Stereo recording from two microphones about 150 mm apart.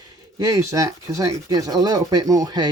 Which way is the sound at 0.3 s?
20° right (ahead or behind).